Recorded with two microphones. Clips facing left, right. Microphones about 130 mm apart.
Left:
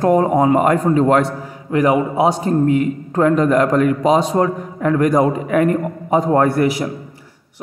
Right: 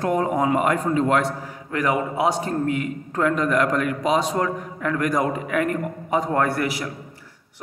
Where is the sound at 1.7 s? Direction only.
25° left (ahead or behind).